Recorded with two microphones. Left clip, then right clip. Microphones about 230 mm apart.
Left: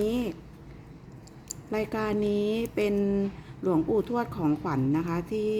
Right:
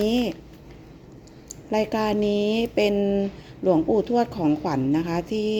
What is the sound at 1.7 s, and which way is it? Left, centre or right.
A woman's voice, centre.